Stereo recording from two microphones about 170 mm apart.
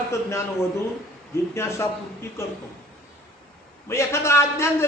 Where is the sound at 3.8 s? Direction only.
15° left (ahead or behind).